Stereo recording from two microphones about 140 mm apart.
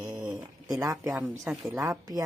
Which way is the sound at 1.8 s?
25° right (ahead or behind).